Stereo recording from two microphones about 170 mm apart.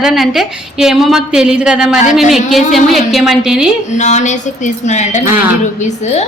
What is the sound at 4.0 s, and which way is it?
A woman's voice, 45° left (ahead or behind).